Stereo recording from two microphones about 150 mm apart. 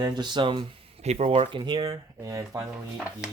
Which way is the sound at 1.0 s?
45° right (ahead or behind).